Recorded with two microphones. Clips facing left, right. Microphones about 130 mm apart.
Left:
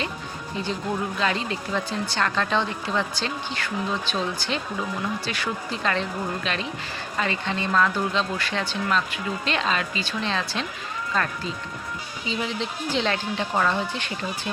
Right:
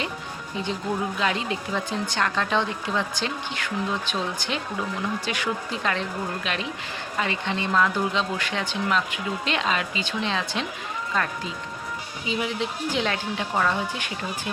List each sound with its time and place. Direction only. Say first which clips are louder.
0.5 s speech: even; 15° right (ahead or behind)
12.2 s speech: right 1 dB; 10° right (ahead or behind)